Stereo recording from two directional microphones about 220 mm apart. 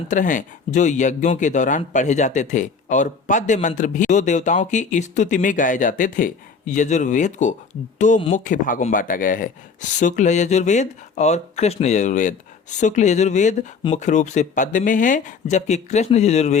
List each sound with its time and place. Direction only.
0.1 s speech: 35° left (ahead or behind)